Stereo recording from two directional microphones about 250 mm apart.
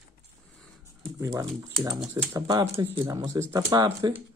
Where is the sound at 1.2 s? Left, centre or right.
Centre.